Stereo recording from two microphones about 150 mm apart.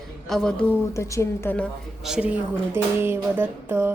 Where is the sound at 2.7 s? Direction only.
15° right (ahead or behind).